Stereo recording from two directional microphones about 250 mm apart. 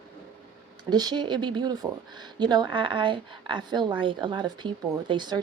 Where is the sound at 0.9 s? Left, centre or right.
Centre.